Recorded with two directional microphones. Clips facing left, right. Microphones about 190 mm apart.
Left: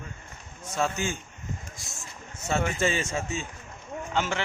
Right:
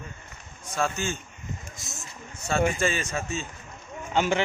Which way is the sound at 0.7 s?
20° left (ahead or behind).